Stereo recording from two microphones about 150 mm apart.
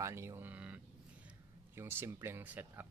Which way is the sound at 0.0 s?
20° right (ahead or behind).